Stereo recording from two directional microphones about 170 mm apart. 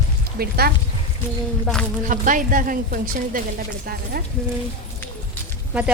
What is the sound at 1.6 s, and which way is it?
Speech, 5° left (ahead or behind).